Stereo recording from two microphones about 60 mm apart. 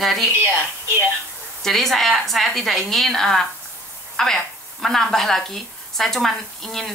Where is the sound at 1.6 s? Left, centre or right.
Centre.